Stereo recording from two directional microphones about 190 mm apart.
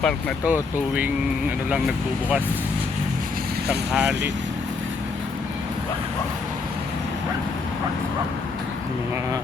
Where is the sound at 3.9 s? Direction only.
5° right (ahead or behind).